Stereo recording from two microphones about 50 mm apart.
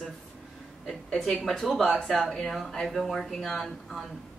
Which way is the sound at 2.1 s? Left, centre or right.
Centre.